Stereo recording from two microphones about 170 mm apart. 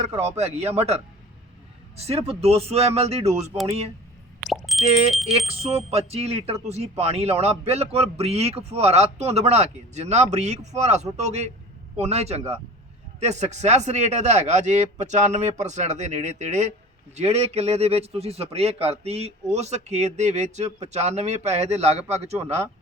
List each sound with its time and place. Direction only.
0.0 s speech: 40° right (ahead or behind)
4.4 s plop: centre (ahead or behind)
4.9 s speech: 40° right (ahead or behind)